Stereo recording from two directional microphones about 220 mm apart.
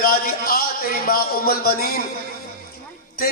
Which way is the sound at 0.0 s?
40° left (ahead or behind).